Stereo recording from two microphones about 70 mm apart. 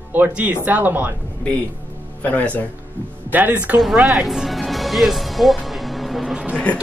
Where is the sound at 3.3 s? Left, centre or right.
Right.